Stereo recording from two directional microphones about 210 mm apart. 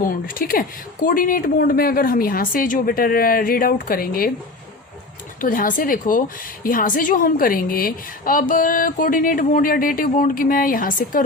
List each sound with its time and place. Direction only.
0.0 s a woman's voice: 40° left (ahead or behind)
5.4 s a woman's voice: 40° left (ahead or behind)